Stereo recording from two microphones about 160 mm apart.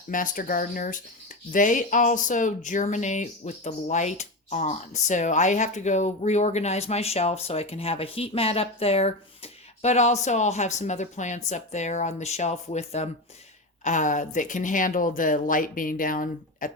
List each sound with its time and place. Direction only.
0.1 s speech: 60° left (ahead or behind)